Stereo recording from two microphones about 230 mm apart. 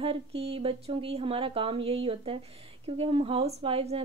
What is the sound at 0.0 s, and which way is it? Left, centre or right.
A woman's voice, right.